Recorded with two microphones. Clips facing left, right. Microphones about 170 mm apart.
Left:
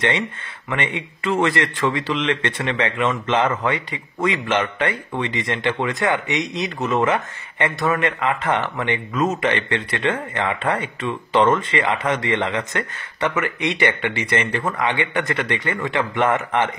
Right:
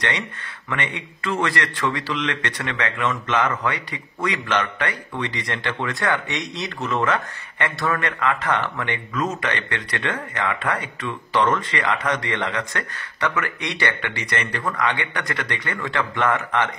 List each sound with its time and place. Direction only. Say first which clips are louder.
0.7 s a man's voice: left 3 dB; 25° left (ahead or behind)